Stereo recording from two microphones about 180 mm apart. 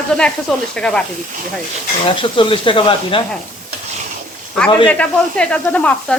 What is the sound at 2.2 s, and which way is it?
Speech, 30° left (ahead or behind).